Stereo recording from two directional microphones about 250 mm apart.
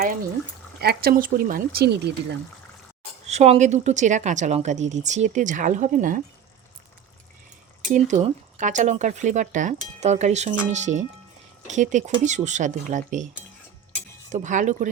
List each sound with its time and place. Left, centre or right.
0.8 s speech: right
3.2 s speech: right
7.9 s speech: right
14.3 s speech: right